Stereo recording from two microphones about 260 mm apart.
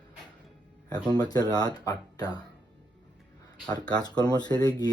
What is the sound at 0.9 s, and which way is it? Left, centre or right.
Speech, centre.